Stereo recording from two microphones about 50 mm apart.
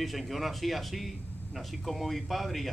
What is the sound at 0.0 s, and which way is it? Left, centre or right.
Speech, centre.